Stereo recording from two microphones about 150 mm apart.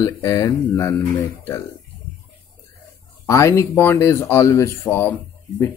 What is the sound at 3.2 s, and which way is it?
Speech, 20° left (ahead or behind).